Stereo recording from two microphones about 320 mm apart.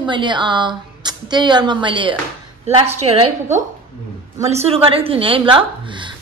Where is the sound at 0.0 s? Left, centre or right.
Centre.